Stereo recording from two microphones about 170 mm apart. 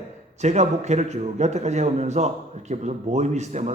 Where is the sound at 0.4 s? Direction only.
40° right (ahead or behind).